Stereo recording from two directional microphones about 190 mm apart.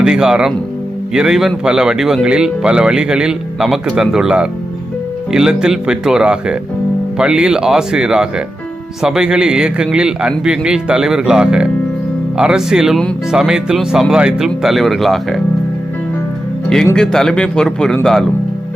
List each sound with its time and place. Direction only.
0.0 s speech: 5° right (ahead or behind)
16.9 s speech: 5° left (ahead or behind)